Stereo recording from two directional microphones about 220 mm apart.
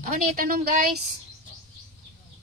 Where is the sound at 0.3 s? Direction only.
40° right (ahead or behind).